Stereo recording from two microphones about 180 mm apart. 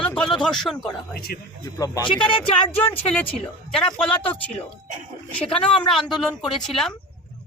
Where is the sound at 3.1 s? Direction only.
10° left (ahead or behind).